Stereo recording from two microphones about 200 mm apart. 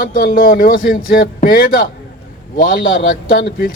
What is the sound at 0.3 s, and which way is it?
Speech, 45° left (ahead or behind).